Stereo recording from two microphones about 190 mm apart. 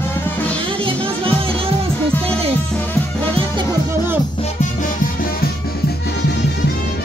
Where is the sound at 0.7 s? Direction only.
30° right (ahead or behind).